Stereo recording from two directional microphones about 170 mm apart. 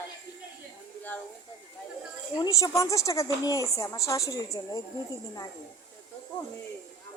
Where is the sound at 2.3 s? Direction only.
20° left (ahead or behind).